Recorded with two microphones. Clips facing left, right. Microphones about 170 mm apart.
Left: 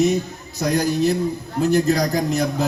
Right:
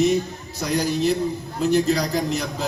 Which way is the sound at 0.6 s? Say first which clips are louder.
Left 2 dB; 50° left (ahead or behind).